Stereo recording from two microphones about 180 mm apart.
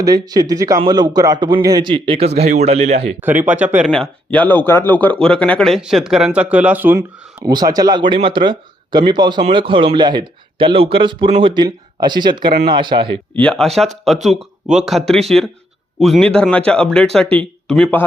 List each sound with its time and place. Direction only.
0.0 s speech: 20° right (ahead or behind)
3.2 s speech: 10° right (ahead or behind)
3.9 s speech: 5° left (ahead or behind); by 13.1 s 25° right (ahead or behind)
13.3 s speech: 5° left (ahead or behind)
14.8 s speech: centre (ahead or behind)